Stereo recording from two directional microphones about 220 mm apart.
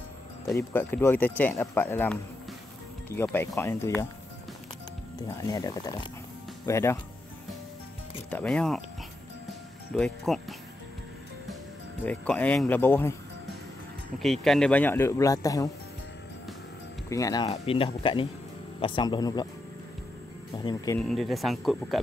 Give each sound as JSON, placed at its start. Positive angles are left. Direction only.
{"t": 0.6, "sound": "a man's voice", "side_deg": 10}
{"t": 5.3, "sound": "a man's voice", "side_deg": 15}
{"t": 8.3, "sound": "speech", "side_deg": 5}
{"t": 9.9, "sound": "speech", "side_deg": 0}
{"t": 12.0, "sound": "a man's voice", "side_deg": 5}
{"t": 14.2, "sound": "a man's voice", "side_deg": 0}
{"t": 17.1, "sound": "speech", "side_deg": 15}
{"t": 20.5, "sound": "a man's voice", "side_deg": 15}
{"t": 21.0, "sound": "speech", "side_deg": 0}